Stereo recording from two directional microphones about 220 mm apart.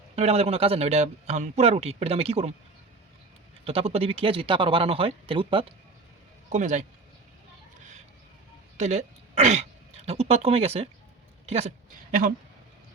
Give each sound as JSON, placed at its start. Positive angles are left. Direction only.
{"t": 0.2, "sound": "a man's voice", "side_deg": -30}
{"t": 3.6, "sound": "a man's voice", "side_deg": -25}
{"t": 6.5, "sound": "speech", "side_deg": -35}
{"t": 8.8, "sound": "speech", "side_deg": -30}